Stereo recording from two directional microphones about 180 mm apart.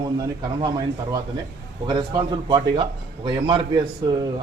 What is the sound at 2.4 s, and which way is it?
A man's voice, 25° right (ahead or behind).